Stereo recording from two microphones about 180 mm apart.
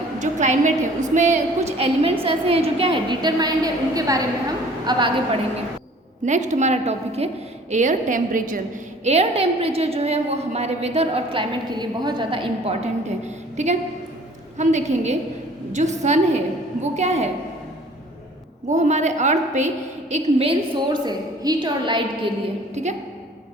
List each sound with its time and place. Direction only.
0.2 s a woman's voice: 40° right (ahead or behind); by 5.1 s 25° right (ahead or behind)
6.2 s a woman's voice: 40° right (ahead or behind)
9.0 s a woman's voice: 35° right (ahead or behind)
18.7 s a woman's voice: 40° right (ahead or behind); by 22.0 s 25° right (ahead or behind)
22.7 s a woman's voice: 40° right (ahead or behind)